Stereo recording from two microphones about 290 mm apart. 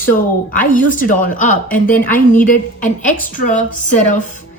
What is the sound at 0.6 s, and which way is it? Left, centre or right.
Speech, left.